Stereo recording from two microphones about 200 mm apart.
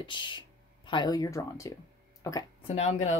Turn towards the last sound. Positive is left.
turn(degrees=35)  # may be behind; listen again after turning